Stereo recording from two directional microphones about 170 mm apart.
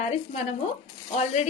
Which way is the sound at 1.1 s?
40° left (ahead or behind).